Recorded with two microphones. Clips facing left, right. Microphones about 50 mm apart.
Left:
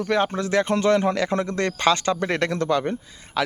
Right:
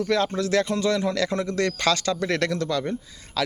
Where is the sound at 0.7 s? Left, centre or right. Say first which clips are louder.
Left 4 dB; left.